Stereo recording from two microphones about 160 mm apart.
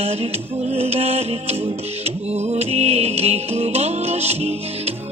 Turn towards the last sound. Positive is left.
turn(degrees=-40)  # may be behind; listen again after turning